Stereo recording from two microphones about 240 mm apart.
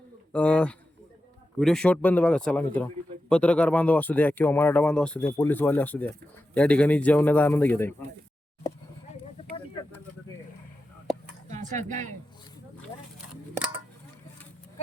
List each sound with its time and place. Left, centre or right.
0.3 s speech: centre
11.5 s speech: right